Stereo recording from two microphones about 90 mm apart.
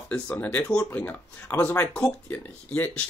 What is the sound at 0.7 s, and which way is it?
Speech, 30° left (ahead or behind).